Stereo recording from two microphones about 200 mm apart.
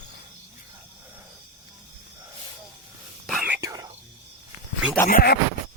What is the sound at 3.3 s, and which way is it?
Whispering, 5° right (ahead or behind).